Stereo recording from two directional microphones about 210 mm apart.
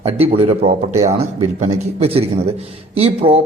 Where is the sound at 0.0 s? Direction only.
30° right (ahead or behind).